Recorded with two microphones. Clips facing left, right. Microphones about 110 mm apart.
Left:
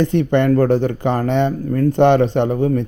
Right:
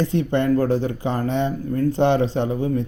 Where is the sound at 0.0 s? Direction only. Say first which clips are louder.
Left 5 dB; 60° left (ahead or behind).